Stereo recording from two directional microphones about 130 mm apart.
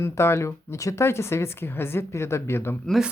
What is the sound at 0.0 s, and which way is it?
Speech, 20° left (ahead or behind).